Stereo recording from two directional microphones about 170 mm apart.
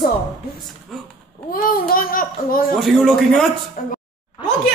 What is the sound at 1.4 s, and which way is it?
A child's voice, 60° left (ahead or behind).